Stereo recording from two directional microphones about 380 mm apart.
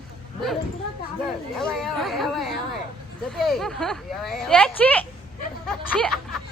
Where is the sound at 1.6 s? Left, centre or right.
Centre.